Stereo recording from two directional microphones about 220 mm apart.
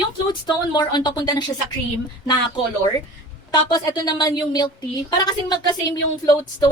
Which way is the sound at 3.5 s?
20° left (ahead or behind).